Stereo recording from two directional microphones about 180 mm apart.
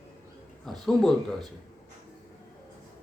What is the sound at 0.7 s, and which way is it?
Speech, centre (ahead or behind).